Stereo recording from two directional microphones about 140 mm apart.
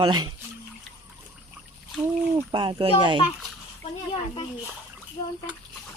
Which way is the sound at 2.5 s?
35° right (ahead or behind).